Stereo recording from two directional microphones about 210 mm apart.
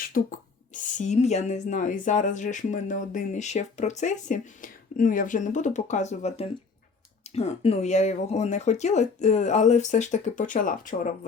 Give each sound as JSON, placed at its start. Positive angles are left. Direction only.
{"t": 0.1, "sound": "speech", "side_deg": 40}